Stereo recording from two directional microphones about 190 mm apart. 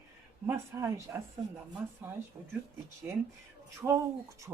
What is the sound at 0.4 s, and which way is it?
Speech, 15° right (ahead or behind).